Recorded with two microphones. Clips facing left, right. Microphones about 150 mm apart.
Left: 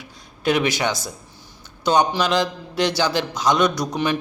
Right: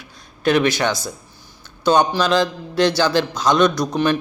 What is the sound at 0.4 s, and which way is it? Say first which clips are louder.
A man's voice: right 3 dB; 15° left (ahead or behind).